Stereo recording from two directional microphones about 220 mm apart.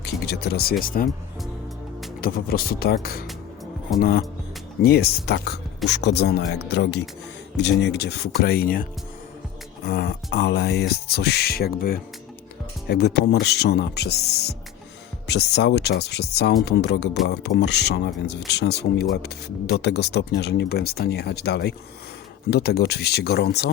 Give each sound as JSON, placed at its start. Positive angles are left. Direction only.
{"t": 0.0, "sound": "speech", "side_deg": 50}
{"t": 2.2, "sound": "speech", "side_deg": 45}